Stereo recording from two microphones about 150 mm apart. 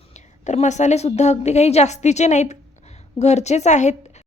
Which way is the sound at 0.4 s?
50° left (ahead or behind).